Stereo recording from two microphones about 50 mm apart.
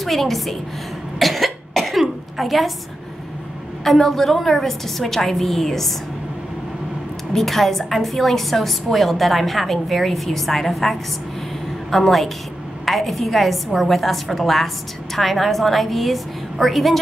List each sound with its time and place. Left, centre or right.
0.0 s a woman's voice: centre
1.2 s cough: centre
3.8 s a woman's voice: centre
7.3 s a woman's voice: centre